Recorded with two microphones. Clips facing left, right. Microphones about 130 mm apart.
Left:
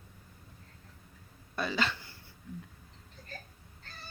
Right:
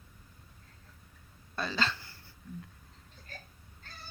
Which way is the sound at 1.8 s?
20° left (ahead or behind).